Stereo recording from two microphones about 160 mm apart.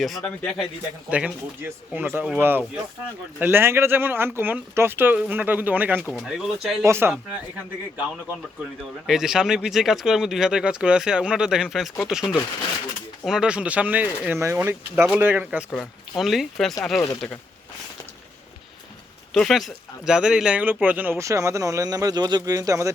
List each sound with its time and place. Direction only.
0.3 s speech: 5° left (ahead or behind)
1.1 s speech: 10° right (ahead or behind)
6.8 s speech: 15° right (ahead or behind)
9.0 s speech: 5° right (ahead or behind)
15.7 s speech: 5° left (ahead or behind)
19.3 s speech: centre (ahead or behind); by 22.9 s 20° right (ahead or behind)